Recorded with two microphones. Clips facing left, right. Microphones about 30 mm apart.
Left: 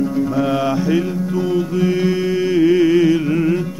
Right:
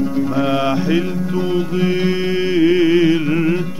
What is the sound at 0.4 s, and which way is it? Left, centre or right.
Mantra, centre.